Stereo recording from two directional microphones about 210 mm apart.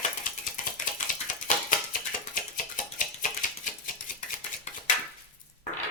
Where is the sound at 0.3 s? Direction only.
40° left (ahead or behind).